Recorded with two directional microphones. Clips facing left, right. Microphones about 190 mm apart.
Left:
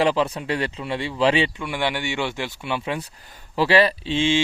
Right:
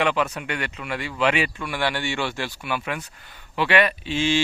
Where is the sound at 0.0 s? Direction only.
30° left (ahead or behind).